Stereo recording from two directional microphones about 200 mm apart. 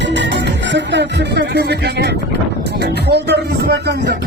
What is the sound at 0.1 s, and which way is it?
Speech, 65° right (ahead or behind).